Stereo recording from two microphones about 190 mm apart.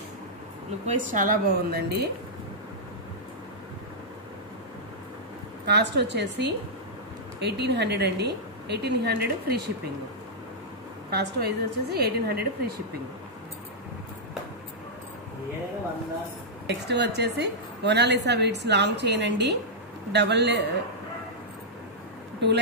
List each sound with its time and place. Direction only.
0.8 s speech: 45° right (ahead or behind)
5.7 s a woman's voice: 60° right (ahead or behind)
11.1 s a woman's voice: 60° right (ahead or behind)
16.6 s a woman's voice: 60° right (ahead or behind)
22.4 s speech: 65° right (ahead or behind)